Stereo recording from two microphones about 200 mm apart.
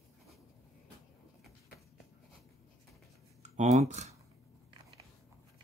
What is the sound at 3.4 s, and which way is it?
Speech, 35° right (ahead or behind).